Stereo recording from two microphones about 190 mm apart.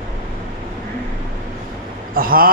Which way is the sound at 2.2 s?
50° right (ahead or behind).